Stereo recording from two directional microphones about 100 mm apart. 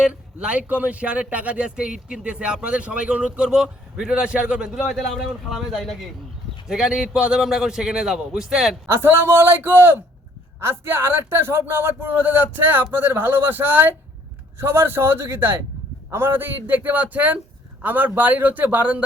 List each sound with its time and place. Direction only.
0.0 s a man's voice: 10° right (ahead or behind)
8.9 s a man's voice: 25° right (ahead or behind)